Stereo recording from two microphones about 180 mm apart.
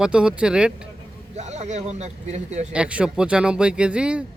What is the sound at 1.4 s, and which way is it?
Speech, 40° right (ahead or behind).